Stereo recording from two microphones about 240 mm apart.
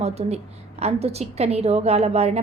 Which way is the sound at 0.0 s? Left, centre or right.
Right.